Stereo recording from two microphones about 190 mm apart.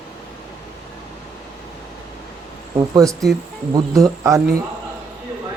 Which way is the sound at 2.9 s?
15° right (ahead or behind).